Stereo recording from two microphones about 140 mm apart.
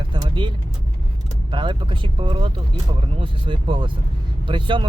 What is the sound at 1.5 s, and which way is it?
Speech, 35° right (ahead or behind).